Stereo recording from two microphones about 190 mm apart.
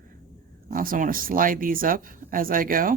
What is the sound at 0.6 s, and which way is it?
Speech, 45° right (ahead or behind).